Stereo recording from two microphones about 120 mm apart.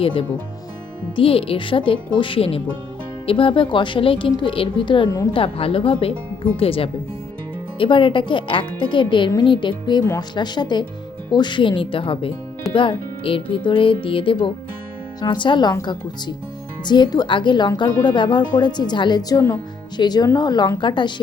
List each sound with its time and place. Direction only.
0.0 s speech: 45° left (ahead or behind)
5.3 s speech: 50° left (ahead or behind)